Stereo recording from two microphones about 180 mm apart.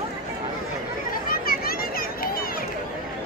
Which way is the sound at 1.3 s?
55° left (ahead or behind).